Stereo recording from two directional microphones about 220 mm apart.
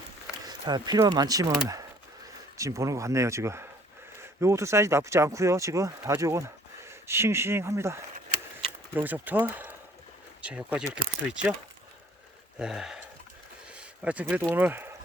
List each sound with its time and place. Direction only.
0.4 s speech: 15° right (ahead or behind)
2.6 s speech: 15° right (ahead or behind)
8.5 s a sound: 10° right (ahead or behind)
10.4 s speech: 5° right (ahead or behind)
12.5 s speech: centre (ahead or behind)
13.7 s a sound: 5° right (ahead or behind)
14.5 s speech: 10° right (ahead or behind)